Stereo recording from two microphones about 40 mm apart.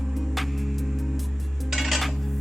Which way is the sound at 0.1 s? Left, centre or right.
Centre.